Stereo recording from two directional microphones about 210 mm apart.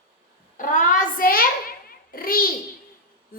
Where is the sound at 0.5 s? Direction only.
40° left (ahead or behind).